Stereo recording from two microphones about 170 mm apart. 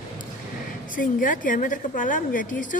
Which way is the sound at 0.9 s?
50° left (ahead or behind).